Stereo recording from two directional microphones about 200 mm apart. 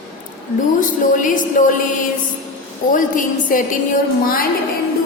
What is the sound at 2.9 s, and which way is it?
A woman's voice, 40° left (ahead or behind).